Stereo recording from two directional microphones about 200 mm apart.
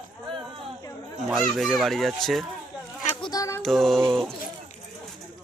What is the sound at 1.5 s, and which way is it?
Speech, centre (ahead or behind).